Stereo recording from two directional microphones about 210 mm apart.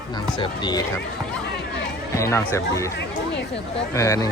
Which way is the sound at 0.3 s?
20° left (ahead or behind).